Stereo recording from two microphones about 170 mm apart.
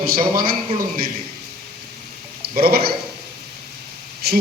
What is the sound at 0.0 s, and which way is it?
Speech, 55° right (ahead or behind).